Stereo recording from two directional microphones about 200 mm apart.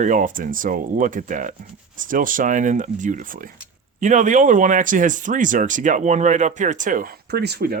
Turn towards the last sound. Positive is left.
turn(degrees=-55)  # may be behind; listen again after turning